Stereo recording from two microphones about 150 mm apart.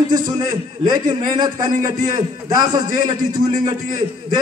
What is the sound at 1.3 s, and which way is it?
A man's voice, 30° right (ahead or behind).